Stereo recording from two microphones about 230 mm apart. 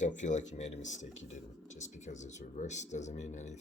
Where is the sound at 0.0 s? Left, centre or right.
Left.